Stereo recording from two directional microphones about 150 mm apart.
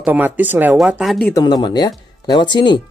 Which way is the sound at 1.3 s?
25° left (ahead or behind).